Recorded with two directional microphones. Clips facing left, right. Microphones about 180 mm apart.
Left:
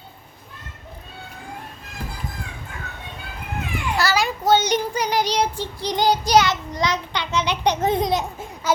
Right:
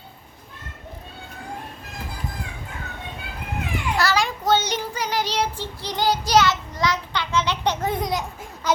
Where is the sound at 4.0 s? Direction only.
5° left (ahead or behind); by 8.4 s 25° left (ahead or behind).